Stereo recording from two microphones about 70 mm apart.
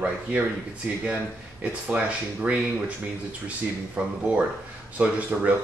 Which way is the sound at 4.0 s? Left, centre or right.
Centre.